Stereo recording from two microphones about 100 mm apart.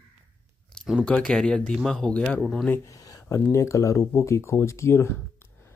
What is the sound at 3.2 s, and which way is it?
Speech, 30° left (ahead or behind).